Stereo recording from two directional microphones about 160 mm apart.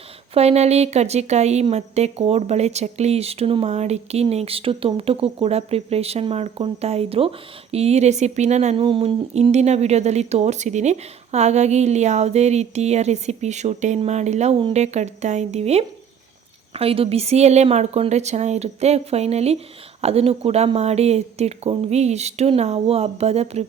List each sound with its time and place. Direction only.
0.3 s a woman's voice: 40° right (ahead or behind)